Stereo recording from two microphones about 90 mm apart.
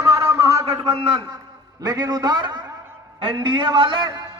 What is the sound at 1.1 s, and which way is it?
A man's voice, 50° right (ahead or behind).